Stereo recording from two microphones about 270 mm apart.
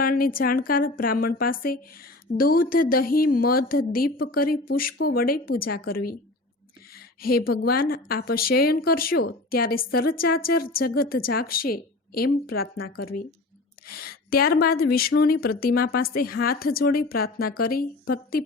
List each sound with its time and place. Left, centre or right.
0.0 s speech: left
7.2 s speech: left